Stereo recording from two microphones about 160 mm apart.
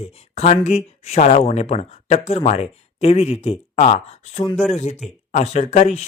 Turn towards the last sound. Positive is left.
turn(degrees=45)  # may be behind; listen again after turning